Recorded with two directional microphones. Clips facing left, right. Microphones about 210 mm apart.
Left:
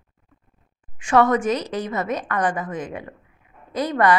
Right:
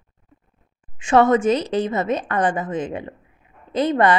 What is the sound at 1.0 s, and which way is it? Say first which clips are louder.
A woman's voice: right 2 dB; 25° right (ahead or behind).